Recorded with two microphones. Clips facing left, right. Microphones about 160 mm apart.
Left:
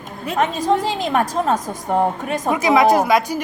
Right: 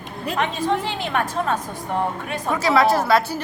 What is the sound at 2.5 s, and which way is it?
Speech, 15° left (ahead or behind).